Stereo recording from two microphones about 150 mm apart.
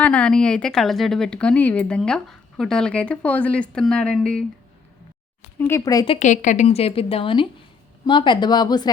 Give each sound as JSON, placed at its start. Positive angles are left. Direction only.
{"t": 0.0, "sound": "a woman's voice", "side_deg": 10}
{"t": 5.5, "sound": "speech", "side_deg": 15}
{"t": 6.1, "sound": "a woman's voice", "side_deg": 55}
{"t": 6.7, "sound": "speech", "side_deg": 40}